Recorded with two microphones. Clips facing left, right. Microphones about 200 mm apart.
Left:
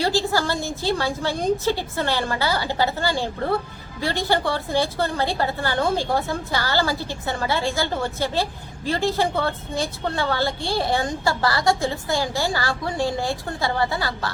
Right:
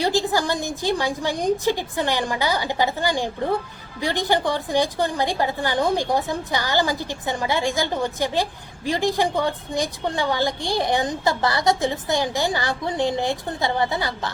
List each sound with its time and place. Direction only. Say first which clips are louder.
0.0 s a woman's voice: right 1 dB; 15° right (ahead or behind)